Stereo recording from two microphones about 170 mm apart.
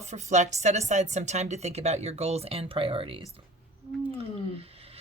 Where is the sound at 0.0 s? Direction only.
45° right (ahead or behind).